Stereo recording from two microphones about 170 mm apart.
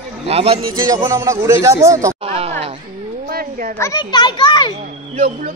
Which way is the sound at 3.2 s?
60° right (ahead or behind).